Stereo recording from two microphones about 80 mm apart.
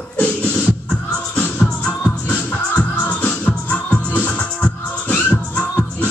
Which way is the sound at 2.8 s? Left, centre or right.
Centre.